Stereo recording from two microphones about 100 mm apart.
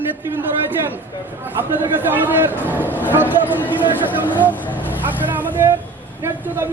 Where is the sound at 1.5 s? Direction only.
20° right (ahead or behind).